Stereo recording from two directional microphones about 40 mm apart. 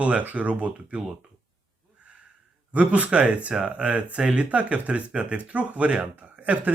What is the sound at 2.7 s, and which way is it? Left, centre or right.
Speech, right.